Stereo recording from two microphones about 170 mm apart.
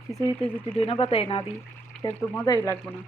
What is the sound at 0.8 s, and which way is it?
Speech, 35° left (ahead or behind).